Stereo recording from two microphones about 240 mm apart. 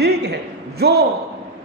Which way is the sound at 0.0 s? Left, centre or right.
Right.